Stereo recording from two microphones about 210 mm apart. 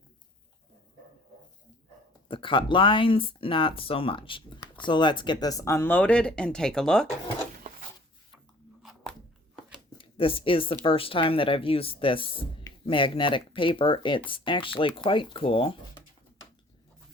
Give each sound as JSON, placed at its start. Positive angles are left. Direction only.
{"t": 2.2, "sound": "speech", "side_deg": 25}
{"t": 8.8, "sound": "crunch", "side_deg": 0}
{"t": 10.0, "sound": "speech", "side_deg": 25}